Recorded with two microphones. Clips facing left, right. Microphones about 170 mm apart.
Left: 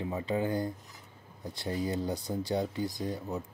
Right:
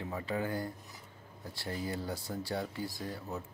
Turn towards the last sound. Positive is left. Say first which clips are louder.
# left 5 dB
turn(degrees=20)  # may be behind; listen again after turning